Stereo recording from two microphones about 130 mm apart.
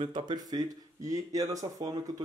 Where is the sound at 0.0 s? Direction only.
35° right (ahead or behind).